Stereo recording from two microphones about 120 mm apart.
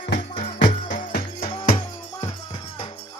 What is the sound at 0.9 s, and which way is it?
Music, 80° left.